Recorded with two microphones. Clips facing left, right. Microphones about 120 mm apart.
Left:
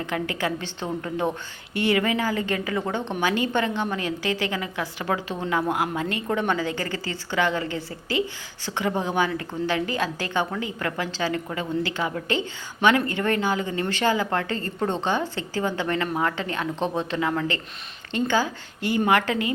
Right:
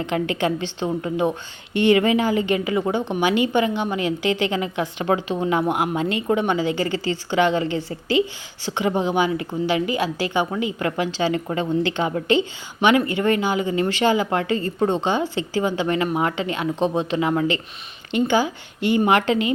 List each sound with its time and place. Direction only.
0.0 s a woman's voice: 20° right (ahead or behind)